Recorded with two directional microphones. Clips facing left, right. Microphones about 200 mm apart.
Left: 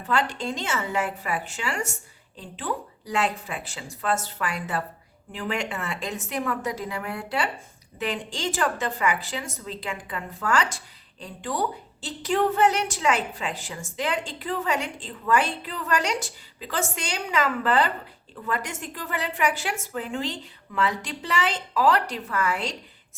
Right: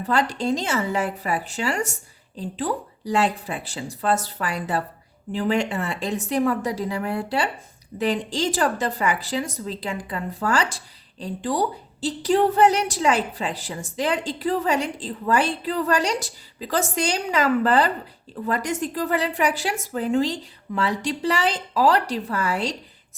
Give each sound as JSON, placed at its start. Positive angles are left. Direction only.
{"t": 0.0, "sound": "a woman's voice", "side_deg": -35}